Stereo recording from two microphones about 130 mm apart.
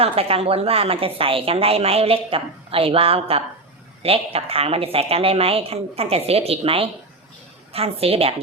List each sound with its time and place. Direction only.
0.0 s a woman's voice: 50° right (ahead or behind)